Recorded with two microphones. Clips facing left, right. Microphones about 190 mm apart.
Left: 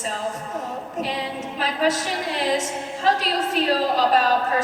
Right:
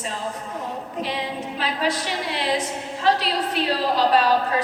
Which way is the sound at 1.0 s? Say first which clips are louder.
Even; 40° left (ahead or behind).